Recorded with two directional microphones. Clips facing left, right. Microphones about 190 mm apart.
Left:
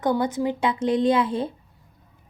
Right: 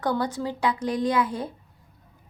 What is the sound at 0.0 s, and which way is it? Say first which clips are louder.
A woman's voice: left 4 dB; 20° left (ahead or behind).